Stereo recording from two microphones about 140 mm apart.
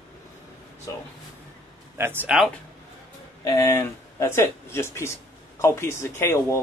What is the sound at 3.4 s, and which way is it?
A man's voice, 25° left (ahead or behind).